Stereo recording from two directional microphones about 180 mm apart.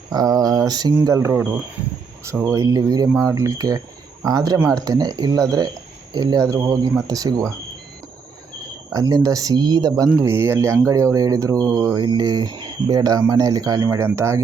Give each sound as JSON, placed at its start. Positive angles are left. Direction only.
{"t": 0.1, "sound": "speech", "side_deg": -20}
{"t": 2.5, "sound": "speech", "side_deg": -20}
{"t": 8.9, "sound": "speech", "side_deg": -20}